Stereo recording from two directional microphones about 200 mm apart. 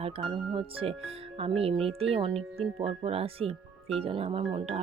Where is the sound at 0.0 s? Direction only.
25° right (ahead or behind).